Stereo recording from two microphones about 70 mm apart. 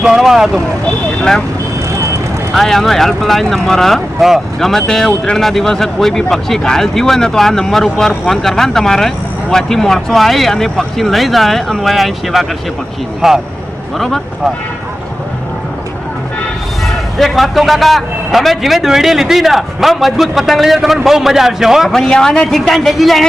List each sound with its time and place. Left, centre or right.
0.0 s speech: centre
1.2 s speech: centre
1.9 s vehicle: right
2.5 s speech: centre
16.8 s speech: centre
21.9 s speech: centre